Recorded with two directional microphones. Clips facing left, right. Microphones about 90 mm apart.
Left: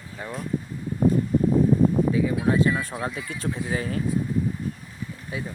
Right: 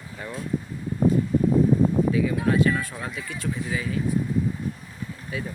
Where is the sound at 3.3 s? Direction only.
35° left (ahead or behind).